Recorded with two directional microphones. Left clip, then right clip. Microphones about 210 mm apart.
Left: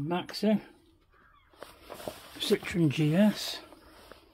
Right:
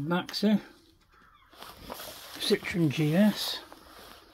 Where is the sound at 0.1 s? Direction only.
Centre (ahead or behind).